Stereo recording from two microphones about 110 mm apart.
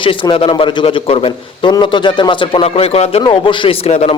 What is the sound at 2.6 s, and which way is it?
Speech, 65° left (ahead or behind).